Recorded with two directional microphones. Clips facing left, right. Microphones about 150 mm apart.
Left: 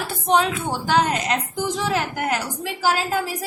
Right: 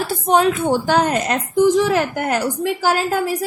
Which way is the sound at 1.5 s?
65° right (ahead or behind).